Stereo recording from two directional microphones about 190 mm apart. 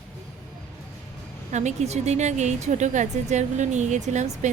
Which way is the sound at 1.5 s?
40° right (ahead or behind).